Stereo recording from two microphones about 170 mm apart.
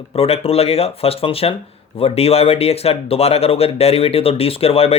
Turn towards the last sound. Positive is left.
turn(degrees=35)  # may be behind; listen again after turning